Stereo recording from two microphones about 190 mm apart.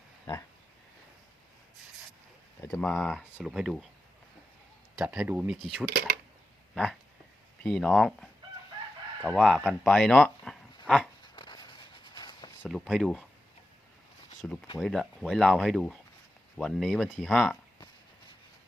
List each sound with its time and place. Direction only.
2.6 s speech: 5° left (ahead or behind)
4.9 s speech: 5° right (ahead or behind)
5.9 s speech: 55° right (ahead or behind)
7.6 s speech: 5° left (ahead or behind)
10.8 s a sound: centre (ahead or behind)
11.2 s a sound: 25° left (ahead or behind)
12.6 s speech: centre (ahead or behind)
14.4 s speech: 5° left (ahead or behind)